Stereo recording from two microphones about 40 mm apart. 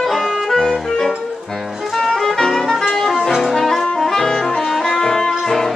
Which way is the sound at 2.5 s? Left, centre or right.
Centre.